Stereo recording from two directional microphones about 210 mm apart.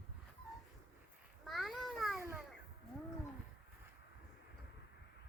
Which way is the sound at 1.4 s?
Centre (ahead or behind).